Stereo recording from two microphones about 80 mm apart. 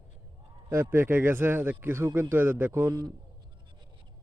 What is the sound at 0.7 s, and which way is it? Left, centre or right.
A man's voice, right.